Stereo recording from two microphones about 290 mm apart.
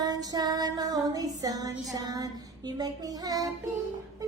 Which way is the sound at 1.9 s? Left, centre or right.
Centre.